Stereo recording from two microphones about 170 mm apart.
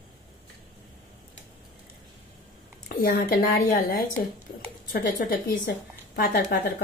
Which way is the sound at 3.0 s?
65° left (ahead or behind).